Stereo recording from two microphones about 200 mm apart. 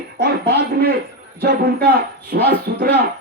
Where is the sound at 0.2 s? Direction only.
50° right (ahead or behind).